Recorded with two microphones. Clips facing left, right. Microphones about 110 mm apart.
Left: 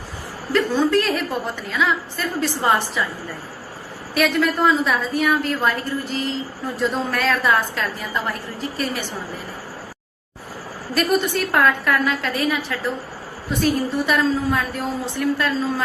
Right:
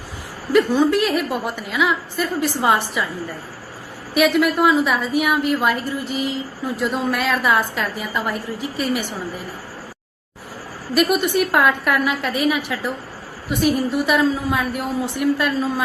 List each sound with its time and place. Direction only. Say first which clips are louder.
0.5 s a woman's voice: right 2 dB; 15° right (ahead or behind)
4.1 s a woman's voice: right 3 dB; 15° right (ahead or behind)
10.9 s a woman's voice: right 2 dB; 10° right (ahead or behind)